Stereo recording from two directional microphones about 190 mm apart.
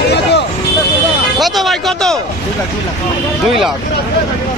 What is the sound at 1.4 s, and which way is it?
Speech, centre (ahead or behind).